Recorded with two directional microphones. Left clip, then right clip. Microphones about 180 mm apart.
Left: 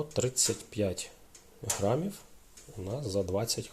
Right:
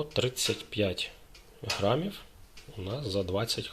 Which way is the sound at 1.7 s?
Centre (ahead or behind).